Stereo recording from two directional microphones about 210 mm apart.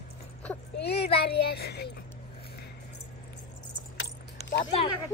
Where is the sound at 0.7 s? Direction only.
50° left (ahead or behind).